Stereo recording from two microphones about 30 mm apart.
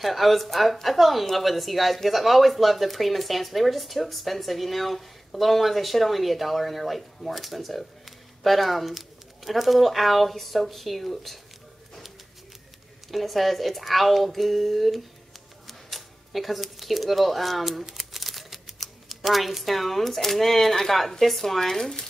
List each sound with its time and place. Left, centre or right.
0.0 s speech: centre
13.1 s speech: centre
17.8 s crumpling: centre
18.8 s speech: centre
21.0 s speech: centre